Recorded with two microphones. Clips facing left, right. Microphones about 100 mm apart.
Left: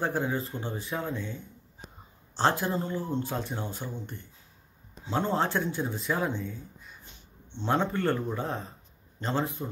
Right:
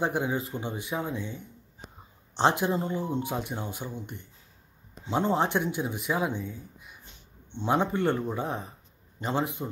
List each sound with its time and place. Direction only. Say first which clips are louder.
0.0 s a woman's voice: right 1 dB; 15° right (ahead or behind)